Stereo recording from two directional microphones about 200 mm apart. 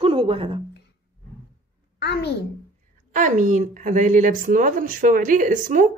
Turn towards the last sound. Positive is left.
turn(degrees=-40)  # may be behind; listen again after turning